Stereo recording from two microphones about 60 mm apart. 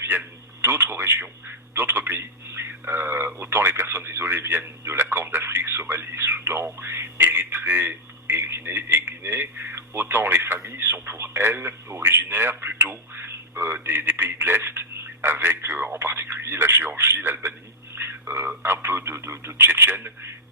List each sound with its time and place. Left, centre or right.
0.0 s speech: right